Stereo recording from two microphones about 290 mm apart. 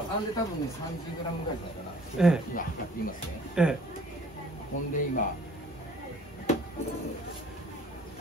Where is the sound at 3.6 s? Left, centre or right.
Centre.